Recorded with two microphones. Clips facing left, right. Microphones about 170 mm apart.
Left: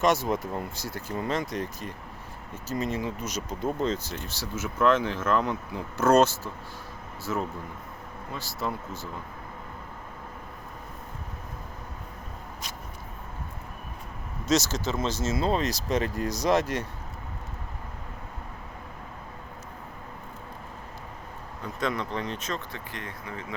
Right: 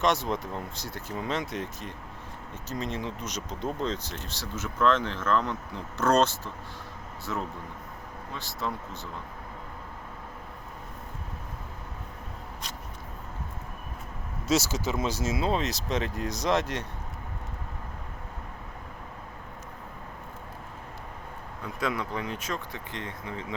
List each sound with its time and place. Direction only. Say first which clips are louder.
0.0 s speech: left 2 dB; 5° left (ahead or behind)
14.4 s speech: left 1 dB; 10° right (ahead or behind)
15.4 s speech: left 3 dB; centre (ahead or behind)
21.8 s speech: left 1 dB; 5° right (ahead or behind)
22.9 s speech: right 3 dB; 25° right (ahead or behind)